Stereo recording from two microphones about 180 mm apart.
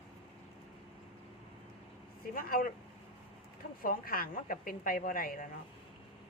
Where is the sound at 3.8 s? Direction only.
55° left (ahead or behind).